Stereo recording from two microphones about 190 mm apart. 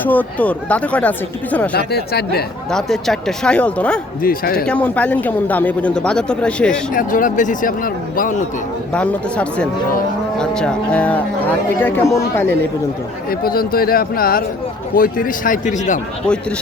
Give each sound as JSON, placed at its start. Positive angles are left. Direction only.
{"t": 0.0, "sound": "speech", "side_deg": 10}
{"t": 1.7, "sound": "speech", "side_deg": 55}
{"t": 2.6, "sound": "speech", "side_deg": 5}
{"t": 4.2, "sound": "a man's voice", "side_deg": 50}
{"t": 4.6, "sound": "speech", "side_deg": 5}
{"t": 6.9, "sound": "a man's voice", "side_deg": 45}
{"t": 8.9, "sound": "speech", "side_deg": 5}
{"t": 13.4, "sound": "a man's voice", "side_deg": 50}